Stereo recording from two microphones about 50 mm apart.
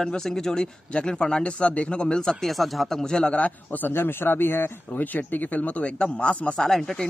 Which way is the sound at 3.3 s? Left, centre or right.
Left.